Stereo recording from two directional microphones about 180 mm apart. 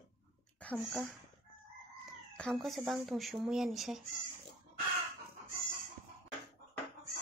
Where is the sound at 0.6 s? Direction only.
5° left (ahead or behind).